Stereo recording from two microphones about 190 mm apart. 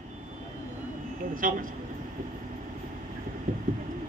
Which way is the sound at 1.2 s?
45° right (ahead or behind).